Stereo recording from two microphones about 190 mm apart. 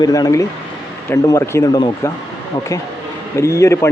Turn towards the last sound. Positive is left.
turn(degrees=15)  # may be behind; listen again after turning